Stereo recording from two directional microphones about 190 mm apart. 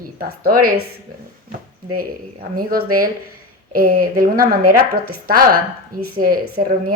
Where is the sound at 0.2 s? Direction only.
50° right (ahead or behind).